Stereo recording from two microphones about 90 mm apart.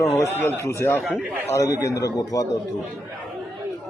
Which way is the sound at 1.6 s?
40° left (ahead or behind).